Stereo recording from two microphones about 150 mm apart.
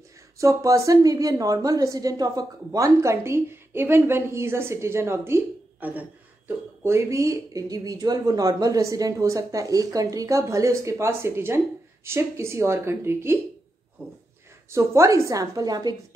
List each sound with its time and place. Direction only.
0.4 s a woman's voice: 20° right (ahead or behind)
14.7 s a woman's voice: 20° right (ahead or behind)